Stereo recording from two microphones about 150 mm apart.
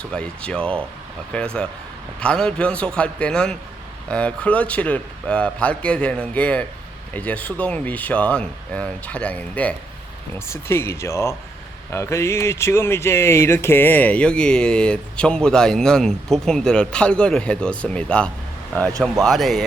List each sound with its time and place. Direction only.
0.1 s speech: 5° left (ahead or behind)